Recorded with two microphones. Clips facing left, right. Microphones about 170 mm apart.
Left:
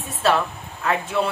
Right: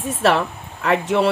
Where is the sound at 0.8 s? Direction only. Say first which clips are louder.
Right 5 dB; 70° right (ahead or behind).